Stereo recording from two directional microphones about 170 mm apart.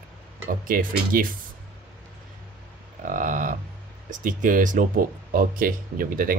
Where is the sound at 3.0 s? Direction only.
50° right (ahead or behind).